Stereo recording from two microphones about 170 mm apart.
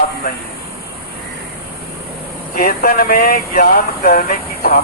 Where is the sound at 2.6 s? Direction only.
65° left (ahead or behind).